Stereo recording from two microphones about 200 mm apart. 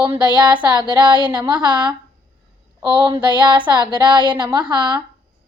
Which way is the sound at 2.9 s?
25° right (ahead or behind).